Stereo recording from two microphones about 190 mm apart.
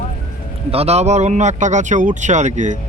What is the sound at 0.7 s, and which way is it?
Speech, 35° right (ahead or behind).